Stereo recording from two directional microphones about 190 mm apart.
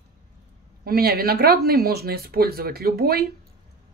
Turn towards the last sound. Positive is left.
turn(degrees=-55)  # may be behind; listen again after turning